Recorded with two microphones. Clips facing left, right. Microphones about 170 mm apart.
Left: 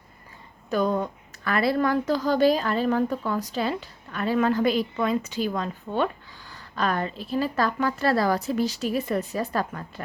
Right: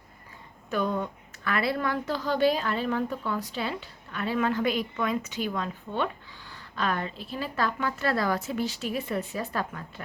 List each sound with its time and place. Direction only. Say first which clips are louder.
0.7 s a woman's voice: left 4 dB; 35° left (ahead or behind)